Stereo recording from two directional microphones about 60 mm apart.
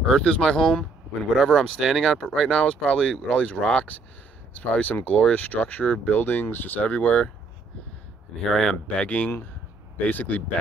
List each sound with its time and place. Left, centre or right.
0.0 s speech: centre
2.5 s speech: centre
8.5 s speech: centre
8.8 s speech: centre